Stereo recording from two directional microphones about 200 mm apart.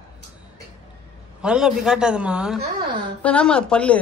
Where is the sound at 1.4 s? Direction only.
5° right (ahead or behind).